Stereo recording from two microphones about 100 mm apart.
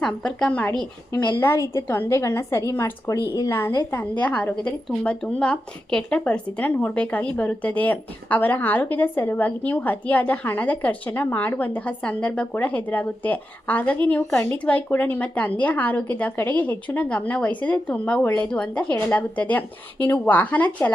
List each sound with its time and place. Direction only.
0.0 s speech: 5° left (ahead or behind)
1.1 s a woman's voice: 20° left (ahead or behind)